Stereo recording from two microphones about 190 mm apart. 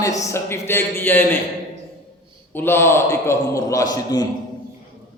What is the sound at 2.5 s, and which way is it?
A man's voice, 10° left (ahead or behind).